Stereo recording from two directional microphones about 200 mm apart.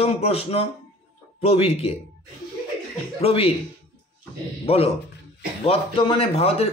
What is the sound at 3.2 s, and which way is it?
Speech, 30° left (ahead or behind).